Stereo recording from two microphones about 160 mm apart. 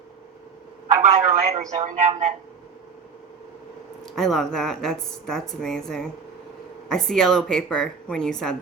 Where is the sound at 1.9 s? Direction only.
50° right (ahead or behind).